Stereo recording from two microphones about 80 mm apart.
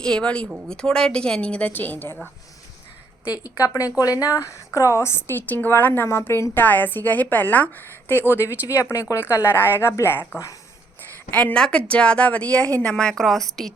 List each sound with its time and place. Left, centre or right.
0.0 s a woman's voice: centre
3.3 s a woman's voice: left
8.7 s speech: left
11.3 s speech: centre